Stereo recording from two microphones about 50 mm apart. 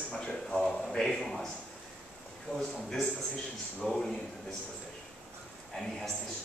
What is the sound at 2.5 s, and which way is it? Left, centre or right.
Speech, left.